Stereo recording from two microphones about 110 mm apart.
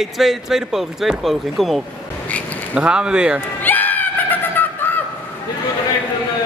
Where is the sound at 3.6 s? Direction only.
15° left (ahead or behind).